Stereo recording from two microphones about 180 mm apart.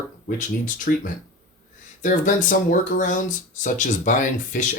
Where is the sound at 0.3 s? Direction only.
45° left (ahead or behind).